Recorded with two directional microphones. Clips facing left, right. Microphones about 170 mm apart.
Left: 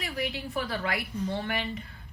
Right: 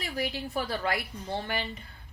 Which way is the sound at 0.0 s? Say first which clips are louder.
Even; 35° right (ahead or behind).